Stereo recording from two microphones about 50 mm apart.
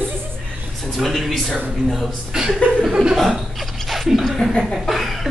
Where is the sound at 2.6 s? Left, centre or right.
Left.